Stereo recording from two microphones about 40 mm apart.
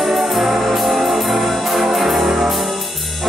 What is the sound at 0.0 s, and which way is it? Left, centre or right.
Music, centre.